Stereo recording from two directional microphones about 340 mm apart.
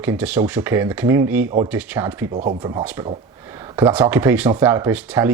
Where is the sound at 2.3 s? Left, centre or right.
Right.